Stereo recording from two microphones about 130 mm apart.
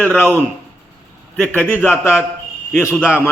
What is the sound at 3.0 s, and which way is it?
Speech, 10° right (ahead or behind).